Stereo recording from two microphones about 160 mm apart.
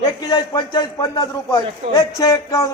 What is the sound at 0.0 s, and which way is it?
A man's voice, 25° left (ahead or behind).